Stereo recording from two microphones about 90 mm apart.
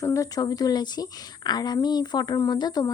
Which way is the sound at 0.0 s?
35° left (ahead or behind).